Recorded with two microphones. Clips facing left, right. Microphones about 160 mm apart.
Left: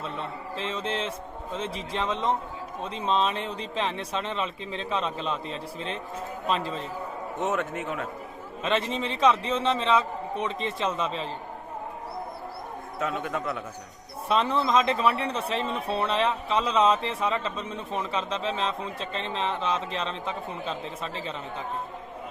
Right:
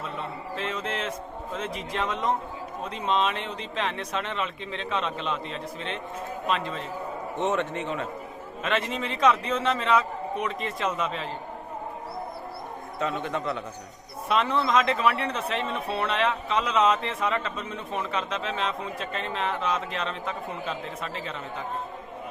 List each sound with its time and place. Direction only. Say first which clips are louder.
0.5 s a man's voice: left 1 dB; 30° left (ahead or behind)
7.3 s a man's voice: right 2 dB; 5° left (ahead or behind)
8.6 s a man's voice: left 1 dB; 30° left (ahead or behind)
13.0 s a man's voice: right 1 dB; 5° left (ahead or behind)
14.3 s a man's voice: even; 30° left (ahead or behind)